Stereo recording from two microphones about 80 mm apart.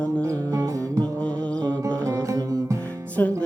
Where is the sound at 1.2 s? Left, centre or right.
Centre.